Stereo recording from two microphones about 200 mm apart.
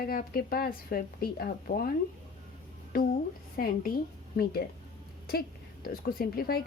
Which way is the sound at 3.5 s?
45° left (ahead or behind).